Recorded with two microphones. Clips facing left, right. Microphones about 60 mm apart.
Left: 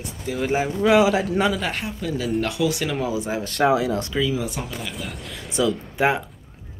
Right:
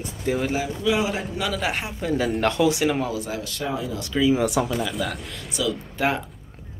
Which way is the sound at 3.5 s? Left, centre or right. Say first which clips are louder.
Left 12 dB; left.